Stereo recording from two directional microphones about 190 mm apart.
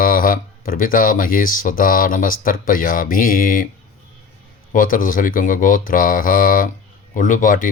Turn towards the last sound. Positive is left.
turn(degrees=45)  # may be behind; listen again after turning